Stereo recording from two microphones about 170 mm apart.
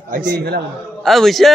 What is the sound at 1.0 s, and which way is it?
Speech, centre (ahead or behind).